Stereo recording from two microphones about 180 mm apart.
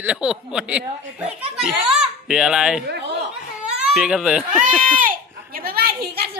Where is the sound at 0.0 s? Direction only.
5° right (ahead or behind).